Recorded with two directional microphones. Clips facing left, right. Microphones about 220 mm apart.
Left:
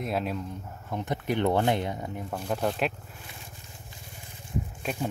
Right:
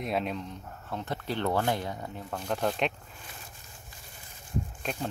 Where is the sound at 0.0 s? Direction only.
Centre (ahead or behind); by 2.2 s 20° left (ahead or behind).